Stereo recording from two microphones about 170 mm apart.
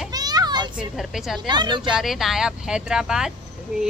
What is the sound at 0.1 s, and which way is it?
Children playing, 25° right (ahead or behind).